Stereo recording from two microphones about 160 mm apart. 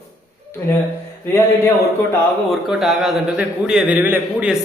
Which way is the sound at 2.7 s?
Centre (ahead or behind).